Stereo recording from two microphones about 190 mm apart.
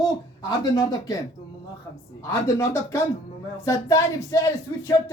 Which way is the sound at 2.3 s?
15° left (ahead or behind).